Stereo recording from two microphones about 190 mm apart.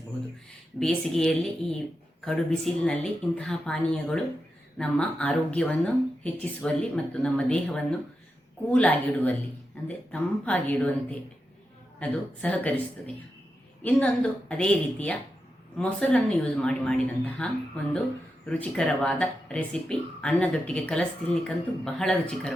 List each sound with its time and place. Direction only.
0.8 s a woman's voice: centre (ahead or behind)
11.9 s a woman's voice: 5° left (ahead or behind)
13.8 s a woman's voice: 5° left (ahead or behind)